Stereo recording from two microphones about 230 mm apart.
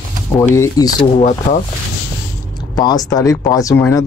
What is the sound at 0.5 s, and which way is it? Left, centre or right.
Speech, centre.